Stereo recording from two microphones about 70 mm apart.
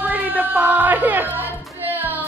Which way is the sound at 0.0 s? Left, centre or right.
Right.